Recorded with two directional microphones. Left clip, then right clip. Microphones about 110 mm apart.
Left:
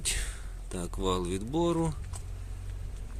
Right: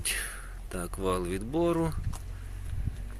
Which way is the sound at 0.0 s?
60° left (ahead or behind).